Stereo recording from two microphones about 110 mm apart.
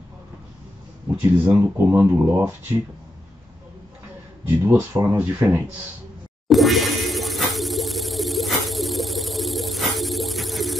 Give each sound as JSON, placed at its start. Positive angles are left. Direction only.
{"t": 1.2, "sound": "speech", "side_deg": -20}
{"t": 4.5, "sound": "speech", "side_deg": -20}
{"t": 6.5, "sound": "a sound", "side_deg": 0}